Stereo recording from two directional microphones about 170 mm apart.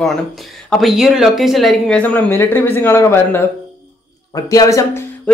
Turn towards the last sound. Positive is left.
turn(degrees=20)  # may be behind; listen again after turning